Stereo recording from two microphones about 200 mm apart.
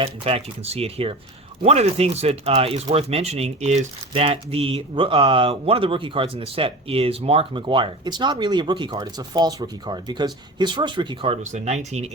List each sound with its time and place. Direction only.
0.0 s speech: 30° right (ahead or behind)